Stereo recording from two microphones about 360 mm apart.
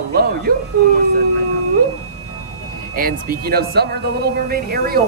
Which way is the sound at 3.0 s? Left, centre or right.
Right.